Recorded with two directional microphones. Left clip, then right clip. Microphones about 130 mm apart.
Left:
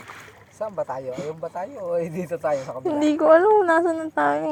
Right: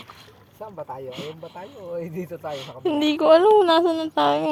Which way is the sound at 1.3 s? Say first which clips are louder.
Left 7 dB; 40° left (ahead or behind).